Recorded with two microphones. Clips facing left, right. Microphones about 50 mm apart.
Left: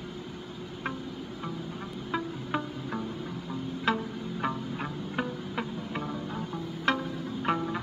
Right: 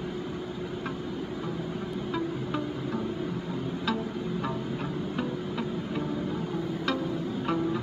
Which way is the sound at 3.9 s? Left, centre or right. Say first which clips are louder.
Left 2 dB; left.